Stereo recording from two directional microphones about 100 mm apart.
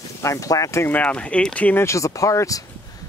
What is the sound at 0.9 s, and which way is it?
Speech, 10° left (ahead or behind).